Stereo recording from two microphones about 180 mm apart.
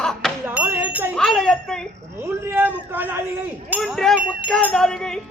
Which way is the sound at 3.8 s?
Centre (ahead or behind).